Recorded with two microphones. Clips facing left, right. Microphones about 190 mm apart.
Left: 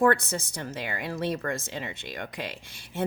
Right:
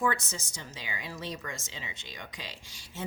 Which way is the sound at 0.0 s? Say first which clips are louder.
Left 8 dB; 60° left (ahead or behind).